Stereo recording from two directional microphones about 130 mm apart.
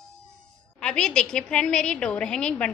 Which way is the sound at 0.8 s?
5° left (ahead or behind).